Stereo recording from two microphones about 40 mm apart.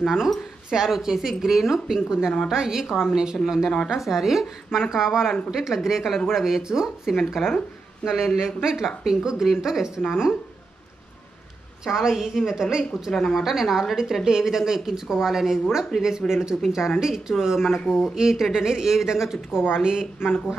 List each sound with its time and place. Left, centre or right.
0.0 s a woman's voice: centre
1.9 s a woman's voice: centre
11.8 s a woman's voice: centre
13.1 s speech: centre
13.4 s a woman's voice: centre
19.7 s a woman's voice: centre